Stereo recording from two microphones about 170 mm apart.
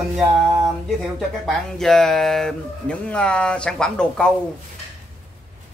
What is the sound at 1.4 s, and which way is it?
Speech, centre (ahead or behind).